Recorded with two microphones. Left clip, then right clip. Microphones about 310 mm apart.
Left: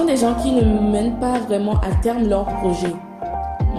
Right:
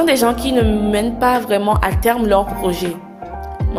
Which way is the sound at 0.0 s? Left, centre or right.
Right.